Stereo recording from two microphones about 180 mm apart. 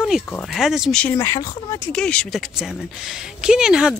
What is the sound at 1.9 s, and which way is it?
Speech, 5° left (ahead or behind).